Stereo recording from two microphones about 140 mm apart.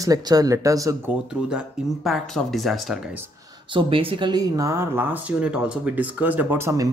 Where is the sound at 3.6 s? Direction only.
40° right (ahead or behind).